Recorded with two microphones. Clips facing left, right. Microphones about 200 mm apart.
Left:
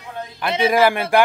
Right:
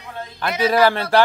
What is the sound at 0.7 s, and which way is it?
Speech, 10° left (ahead or behind).